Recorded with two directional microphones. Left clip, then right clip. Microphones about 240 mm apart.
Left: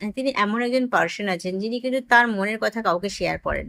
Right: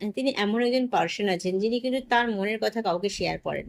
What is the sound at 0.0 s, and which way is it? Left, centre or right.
Speech, centre.